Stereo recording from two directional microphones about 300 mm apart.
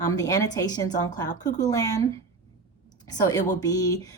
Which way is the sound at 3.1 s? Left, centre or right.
Centre.